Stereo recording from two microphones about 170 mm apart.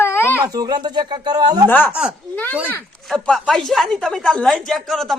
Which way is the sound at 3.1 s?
5° left (ahead or behind).